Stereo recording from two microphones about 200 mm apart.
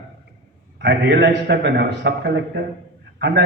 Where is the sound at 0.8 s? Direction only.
60° right (ahead or behind).